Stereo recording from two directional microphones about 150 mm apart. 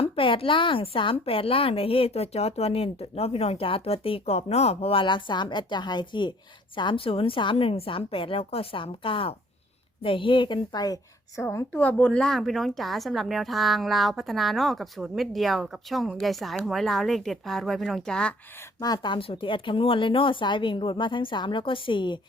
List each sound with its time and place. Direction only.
0.0 s a woman's voice: 40° left (ahead or behind)
11.4 s speech: 10° left (ahead or behind)
18.8 s a woman's voice: 30° left (ahead or behind)